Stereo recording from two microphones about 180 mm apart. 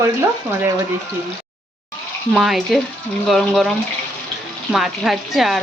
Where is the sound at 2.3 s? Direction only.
Centre (ahead or behind).